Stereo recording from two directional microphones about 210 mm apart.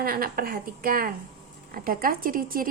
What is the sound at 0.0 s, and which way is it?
A woman's voice, 45° right (ahead or behind).